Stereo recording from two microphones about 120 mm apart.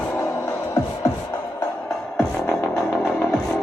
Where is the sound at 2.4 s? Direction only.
20° left (ahead or behind).